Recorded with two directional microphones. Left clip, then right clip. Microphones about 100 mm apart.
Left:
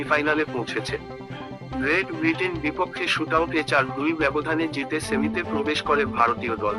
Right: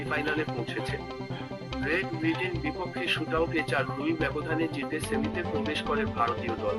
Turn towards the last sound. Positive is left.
turn(degrees=50)  # may be behind; listen again after turning